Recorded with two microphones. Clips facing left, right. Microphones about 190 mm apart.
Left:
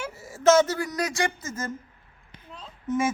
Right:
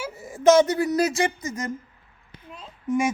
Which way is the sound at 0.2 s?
15° right (ahead or behind).